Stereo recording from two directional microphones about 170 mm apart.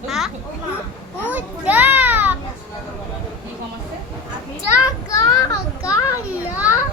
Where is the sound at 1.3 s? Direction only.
10° right (ahead or behind).